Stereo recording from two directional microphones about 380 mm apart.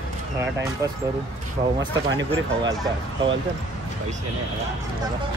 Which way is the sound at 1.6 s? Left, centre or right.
Right.